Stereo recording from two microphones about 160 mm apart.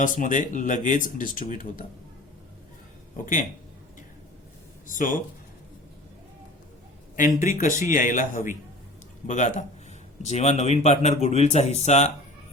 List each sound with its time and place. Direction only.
0.0 s speech: 55° left (ahead or behind)
4.9 s speech: 55° left (ahead or behind)
7.2 s speech: 55° left (ahead or behind)